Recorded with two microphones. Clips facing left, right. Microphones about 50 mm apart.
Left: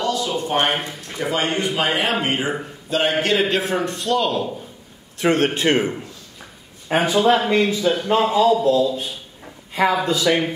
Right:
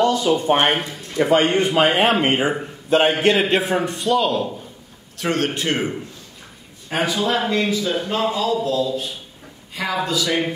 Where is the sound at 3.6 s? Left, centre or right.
Centre.